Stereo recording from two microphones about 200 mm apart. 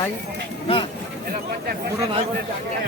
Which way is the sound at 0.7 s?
30° left (ahead or behind).